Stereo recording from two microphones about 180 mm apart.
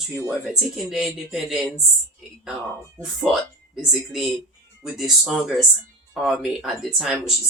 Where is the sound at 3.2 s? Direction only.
5° right (ahead or behind).